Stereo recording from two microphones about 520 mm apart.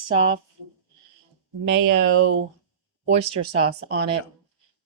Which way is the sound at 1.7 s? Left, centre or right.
Right.